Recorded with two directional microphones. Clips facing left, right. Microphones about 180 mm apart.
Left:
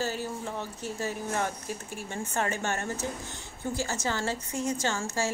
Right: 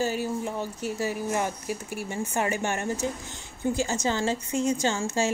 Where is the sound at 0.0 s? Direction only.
15° right (ahead or behind).